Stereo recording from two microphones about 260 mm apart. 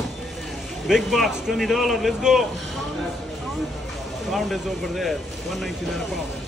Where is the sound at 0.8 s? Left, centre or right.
Centre.